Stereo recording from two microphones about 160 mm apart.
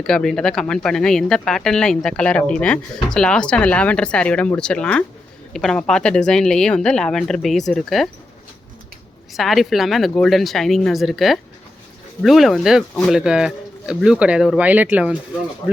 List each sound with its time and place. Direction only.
0.0 s speech: 5° left (ahead or behind)
9.3 s speech: centre (ahead or behind)
13.1 s speech: 5° right (ahead or behind)
15.6 s speech: 15° left (ahead or behind)